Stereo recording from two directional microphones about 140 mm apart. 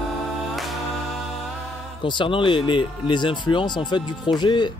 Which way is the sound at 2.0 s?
35° left (ahead or behind).